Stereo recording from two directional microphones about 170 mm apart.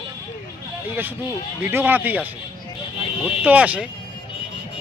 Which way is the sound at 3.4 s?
10° right (ahead or behind).